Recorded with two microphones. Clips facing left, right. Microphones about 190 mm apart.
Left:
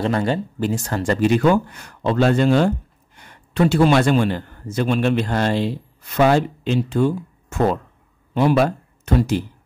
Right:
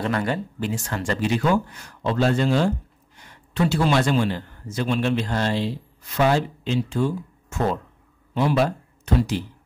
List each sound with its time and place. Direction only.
0.0 s speech: 30° left (ahead or behind)
0.6 s a man's voice: 40° left (ahead or behind)